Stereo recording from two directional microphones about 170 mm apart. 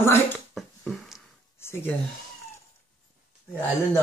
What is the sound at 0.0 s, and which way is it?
Speech, 15° left (ahead or behind).